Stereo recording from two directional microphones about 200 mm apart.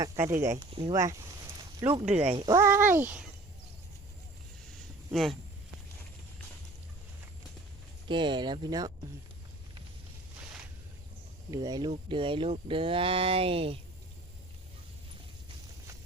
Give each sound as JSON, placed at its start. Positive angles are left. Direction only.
{"t": 0.0, "sound": "speech", "side_deg": -15}
{"t": 0.6, "sound": "speech", "side_deg": -25}
{"t": 2.1, "sound": "speech", "side_deg": -30}
{"t": 5.1, "sound": "speech", "side_deg": 0}
{"t": 8.0, "sound": "speech", "side_deg": -25}
{"t": 11.5, "sound": "speech", "side_deg": -20}